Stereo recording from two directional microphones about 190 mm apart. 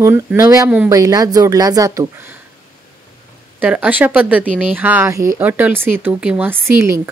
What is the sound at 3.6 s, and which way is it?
Speech, 10° right (ahead or behind).